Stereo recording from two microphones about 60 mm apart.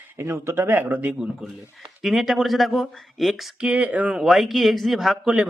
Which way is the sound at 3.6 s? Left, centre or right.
Right.